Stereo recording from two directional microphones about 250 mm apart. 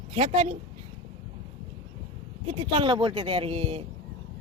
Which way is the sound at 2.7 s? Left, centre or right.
Right.